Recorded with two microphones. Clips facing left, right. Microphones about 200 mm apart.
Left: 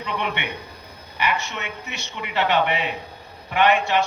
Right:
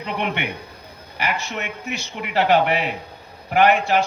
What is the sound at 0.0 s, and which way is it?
A man's voice, 35° right (ahead or behind).